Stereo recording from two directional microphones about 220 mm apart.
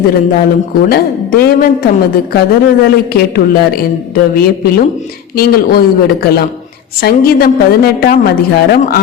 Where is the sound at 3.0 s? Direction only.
45° left (ahead or behind).